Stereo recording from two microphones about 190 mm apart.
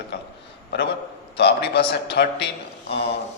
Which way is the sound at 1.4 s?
60° left (ahead or behind).